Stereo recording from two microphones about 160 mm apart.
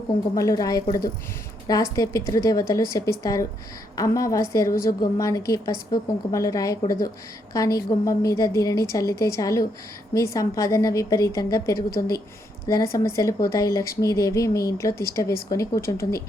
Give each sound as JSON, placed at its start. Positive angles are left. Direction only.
{"t": 0.3, "sound": "speech", "side_deg": 20}